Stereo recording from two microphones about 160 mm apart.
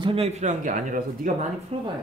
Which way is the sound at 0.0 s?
35° right (ahead or behind).